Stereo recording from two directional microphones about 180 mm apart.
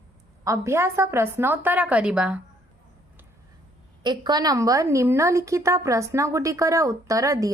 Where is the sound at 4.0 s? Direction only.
25° right (ahead or behind).